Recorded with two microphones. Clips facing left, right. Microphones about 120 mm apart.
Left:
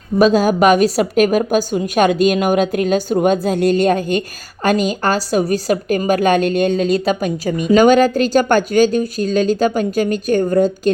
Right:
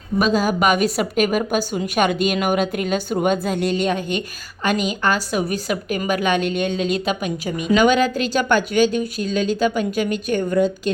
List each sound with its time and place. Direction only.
0.2 s a woman's voice: 40° left (ahead or behind)